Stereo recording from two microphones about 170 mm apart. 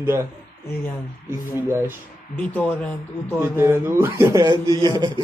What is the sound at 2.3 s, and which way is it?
Speech, 10° left (ahead or behind).